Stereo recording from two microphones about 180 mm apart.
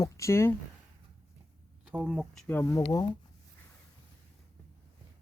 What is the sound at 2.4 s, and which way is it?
Speech, 15° left (ahead or behind).